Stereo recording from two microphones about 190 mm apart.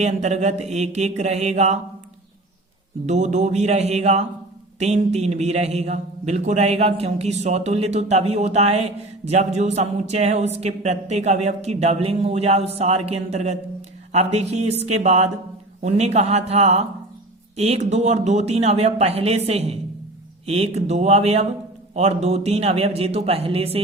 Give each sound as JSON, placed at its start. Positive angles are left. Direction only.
{"t": 0.0, "sound": "a man's voice", "side_deg": -35}
{"t": 3.1, "sound": "a man's voice", "side_deg": -40}